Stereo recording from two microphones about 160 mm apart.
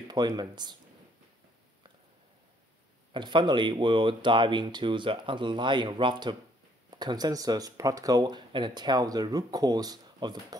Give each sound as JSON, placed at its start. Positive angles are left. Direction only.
{"t": 0.1, "sound": "speech", "side_deg": -25}
{"t": 3.1, "sound": "speech", "side_deg": -30}